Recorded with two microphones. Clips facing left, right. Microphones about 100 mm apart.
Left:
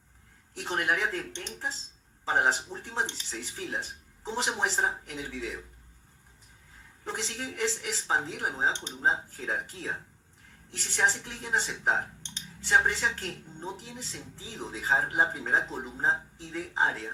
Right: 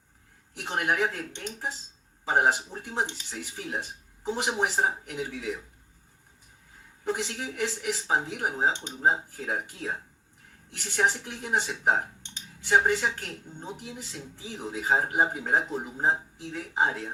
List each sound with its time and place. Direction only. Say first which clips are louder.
0.7 s speech: right 2 dB; 15° right (ahead or behind)
7.0 s speech: right 5 dB; 10° right (ahead or behind)
10.9 s speech: right 2 dB; 15° right (ahead or behind)